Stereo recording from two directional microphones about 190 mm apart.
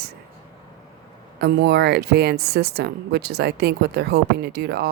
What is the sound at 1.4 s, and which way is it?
Speech, 60° right (ahead or behind).